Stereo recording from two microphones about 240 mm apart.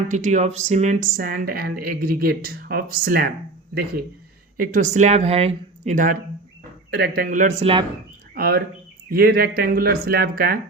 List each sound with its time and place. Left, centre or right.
0.1 s speech: right
4.5 s speech: right
8.4 s speech: right